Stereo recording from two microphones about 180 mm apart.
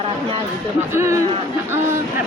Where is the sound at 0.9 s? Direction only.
15° right (ahead or behind).